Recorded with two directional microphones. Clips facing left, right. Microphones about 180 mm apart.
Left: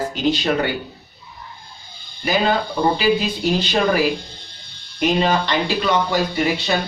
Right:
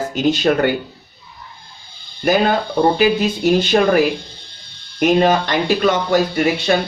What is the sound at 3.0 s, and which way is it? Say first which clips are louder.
Speech: right 3 dB; 50° right (ahead or behind).